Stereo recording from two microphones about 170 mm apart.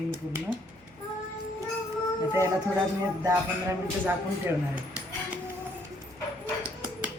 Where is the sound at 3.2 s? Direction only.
15° right (ahead or behind).